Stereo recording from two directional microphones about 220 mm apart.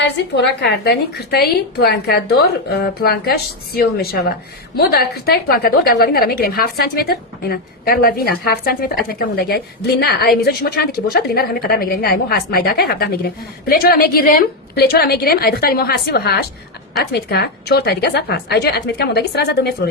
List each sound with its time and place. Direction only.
0.0 s a woman's voice: 50° left (ahead or behind)